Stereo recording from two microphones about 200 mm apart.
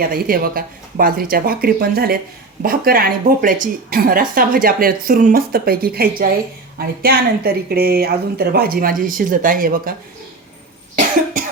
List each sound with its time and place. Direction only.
0.0 s speech: 45° right (ahead or behind)